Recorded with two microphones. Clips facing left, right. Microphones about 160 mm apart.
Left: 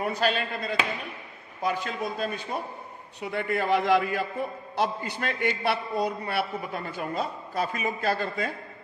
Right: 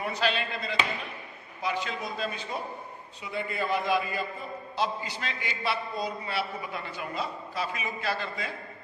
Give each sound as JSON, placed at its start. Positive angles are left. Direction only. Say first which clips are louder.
{"t": 0.0, "sound": "a man's voice", "louder": "left 3 dB", "side_deg": 45}
{"t": 3.2, "sound": "a man's voice", "louder": "left 4 dB", "side_deg": 65}